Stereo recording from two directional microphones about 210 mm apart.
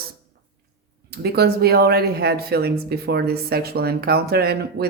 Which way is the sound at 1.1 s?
50° right (ahead or behind).